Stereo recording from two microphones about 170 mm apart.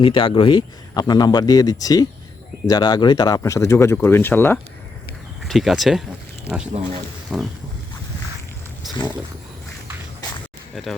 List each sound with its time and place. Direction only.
0.0 s speech: 30° left (ahead or behind); by 4.6 s 10° left (ahead or behind)
5.4 s speech: centre (ahead or behind)
7.3 s boat: centre (ahead or behind)